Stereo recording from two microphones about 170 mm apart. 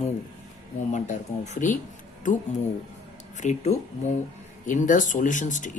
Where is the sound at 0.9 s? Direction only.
45° left (ahead or behind).